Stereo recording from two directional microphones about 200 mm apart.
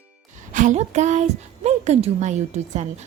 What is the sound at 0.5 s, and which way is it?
A woman's voice, 40° right (ahead or behind).